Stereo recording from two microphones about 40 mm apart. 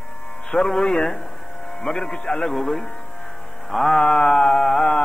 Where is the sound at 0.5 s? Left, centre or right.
Centre.